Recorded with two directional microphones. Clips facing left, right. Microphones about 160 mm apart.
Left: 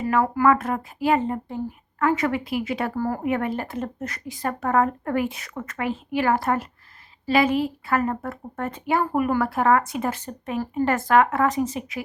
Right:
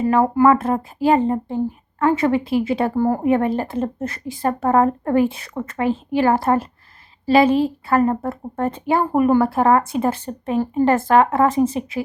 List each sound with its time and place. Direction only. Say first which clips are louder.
0.0 s speech: right 5 dB; 30° right (ahead or behind)